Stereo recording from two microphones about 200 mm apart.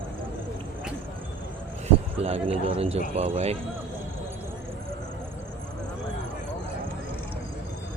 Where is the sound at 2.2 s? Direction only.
30° right (ahead or behind).